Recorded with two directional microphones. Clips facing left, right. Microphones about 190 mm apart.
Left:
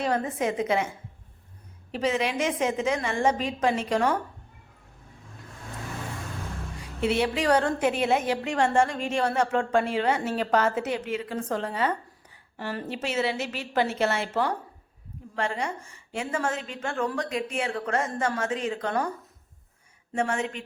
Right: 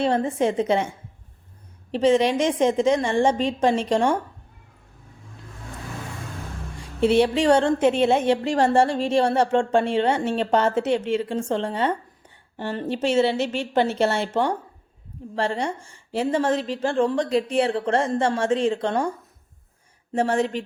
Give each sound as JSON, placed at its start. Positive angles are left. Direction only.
{"t": 0.0, "sound": "a woman's voice", "side_deg": -30}
{"t": 1.9, "sound": "a woman's voice", "side_deg": -30}
{"t": 6.7, "sound": "a woman's voice", "side_deg": -30}
{"t": 20.1, "sound": "a woman's voice", "side_deg": -35}